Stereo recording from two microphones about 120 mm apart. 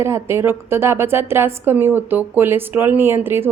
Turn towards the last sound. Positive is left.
turn(degrees=-20)  # may be behind; listen again after turning